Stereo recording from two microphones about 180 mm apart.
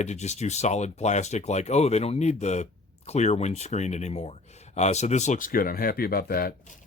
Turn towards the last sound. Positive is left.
turn(degrees=55)  # may be behind; listen again after turning